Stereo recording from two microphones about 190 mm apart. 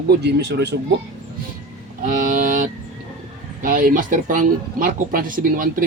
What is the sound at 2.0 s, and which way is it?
Speech, 45° right (ahead or behind).